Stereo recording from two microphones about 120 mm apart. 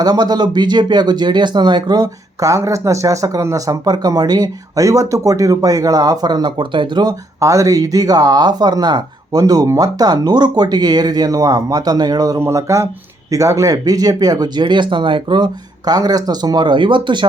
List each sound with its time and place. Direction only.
0.0 s speech: 35° right (ahead or behind)